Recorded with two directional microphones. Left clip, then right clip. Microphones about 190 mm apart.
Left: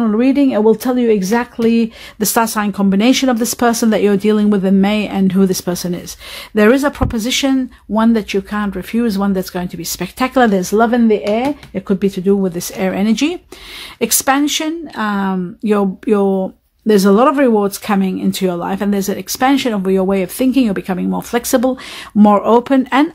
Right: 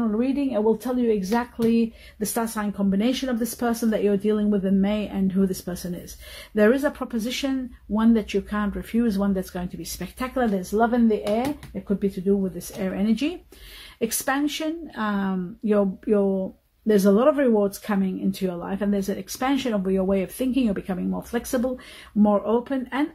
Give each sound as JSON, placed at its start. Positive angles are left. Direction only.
{"t": 0.0, "sound": "speech", "side_deg": 50}